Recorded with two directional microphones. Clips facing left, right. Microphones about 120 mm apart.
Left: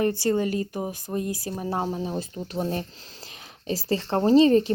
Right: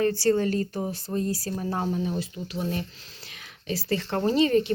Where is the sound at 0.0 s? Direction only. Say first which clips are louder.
Right 1 dB; 15° left (ahead or behind).